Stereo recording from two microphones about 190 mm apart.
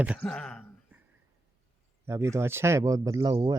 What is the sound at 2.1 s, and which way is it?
Speech, 15° right (ahead or behind).